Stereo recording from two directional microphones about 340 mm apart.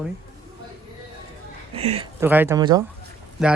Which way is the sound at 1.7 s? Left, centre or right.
Centre.